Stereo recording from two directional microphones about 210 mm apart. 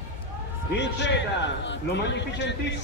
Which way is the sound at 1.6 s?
55° left (ahead or behind).